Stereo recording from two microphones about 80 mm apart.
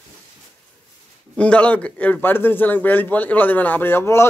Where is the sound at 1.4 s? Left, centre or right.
Centre.